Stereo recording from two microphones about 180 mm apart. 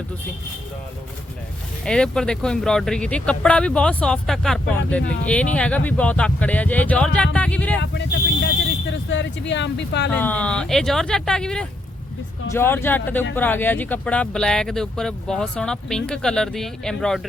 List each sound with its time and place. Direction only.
1.8 s speech: 5° left (ahead or behind)
8.9 s speech: 85° left
10.1 s speech: 10° left (ahead or behind)